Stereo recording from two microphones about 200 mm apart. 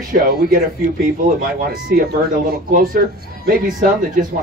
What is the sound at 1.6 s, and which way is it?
Speech, 45° right (ahead or behind).